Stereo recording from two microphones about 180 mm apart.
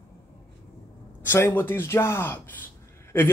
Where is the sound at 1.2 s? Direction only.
15° left (ahead or behind).